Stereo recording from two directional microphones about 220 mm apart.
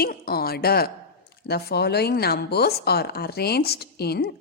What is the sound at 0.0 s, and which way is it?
Speech, 45° left (ahead or behind).